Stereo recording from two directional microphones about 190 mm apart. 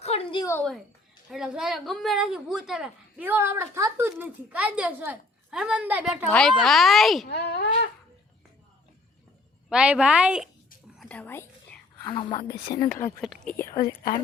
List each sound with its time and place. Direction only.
0.0 s a sound: 30° left (ahead or behind)
0.5 s a woman's voice: 5° left (ahead or behind)
6.3 s a woman's voice: centre (ahead or behind)
7.3 s speech: 60° left (ahead or behind)
9.6 s a woman's voice: 5° right (ahead or behind)
10.9 s whispering: 5° left (ahead or behind)
12.1 s speech: 25° left (ahead or behind)
13.0 s speech: 15° left (ahead or behind)
13.2 s a woman's voice: centre (ahead or behind)
13.6 s a woman's voice: 45° left (ahead or behind)